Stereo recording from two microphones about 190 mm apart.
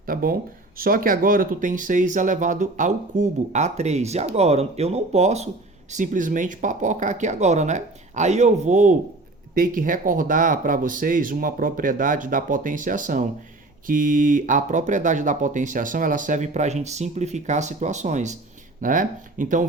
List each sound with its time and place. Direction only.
0.0 s speech: 50° right (ahead or behind)